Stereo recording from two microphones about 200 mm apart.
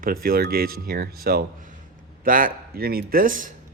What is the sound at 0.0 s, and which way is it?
A man's voice, 45° right (ahead or behind).